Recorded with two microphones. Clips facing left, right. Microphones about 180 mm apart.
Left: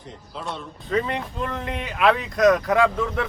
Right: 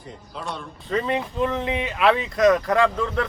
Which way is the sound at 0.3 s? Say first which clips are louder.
Even; centre (ahead or behind).